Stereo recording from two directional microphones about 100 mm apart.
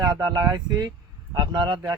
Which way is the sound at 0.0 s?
45° right (ahead or behind).